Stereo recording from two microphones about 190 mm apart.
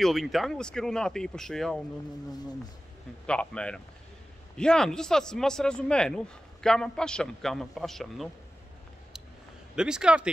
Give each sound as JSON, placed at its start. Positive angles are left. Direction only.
{"t": 0.0, "sound": "speech", "side_deg": 0}
{"t": 3.3, "sound": "speech", "side_deg": 5}
{"t": 9.8, "sound": "speech", "side_deg": -5}